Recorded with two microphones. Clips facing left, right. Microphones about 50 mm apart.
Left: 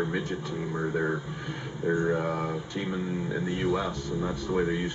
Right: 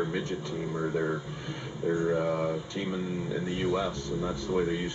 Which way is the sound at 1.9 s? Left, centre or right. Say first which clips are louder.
Left 1 dB; centre.